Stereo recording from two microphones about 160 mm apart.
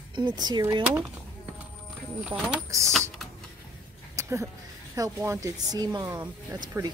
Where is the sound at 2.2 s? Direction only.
5° right (ahead or behind).